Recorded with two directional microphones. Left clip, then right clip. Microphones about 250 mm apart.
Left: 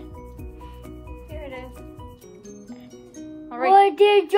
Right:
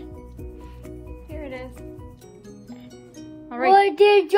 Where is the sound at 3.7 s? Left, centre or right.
Centre.